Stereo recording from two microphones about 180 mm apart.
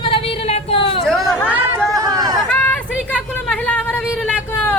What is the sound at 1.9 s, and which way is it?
Chatter, 20° right (ahead or behind).